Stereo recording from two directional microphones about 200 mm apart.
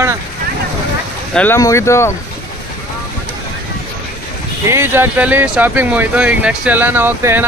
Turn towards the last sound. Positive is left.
turn(degrees=-10)  # may be behind; listen again after turning